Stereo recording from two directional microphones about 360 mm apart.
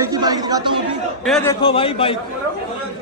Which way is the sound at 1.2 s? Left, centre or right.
Centre.